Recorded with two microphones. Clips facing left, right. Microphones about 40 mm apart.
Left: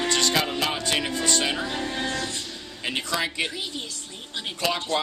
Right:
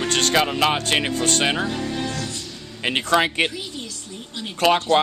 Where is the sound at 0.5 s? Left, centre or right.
Right.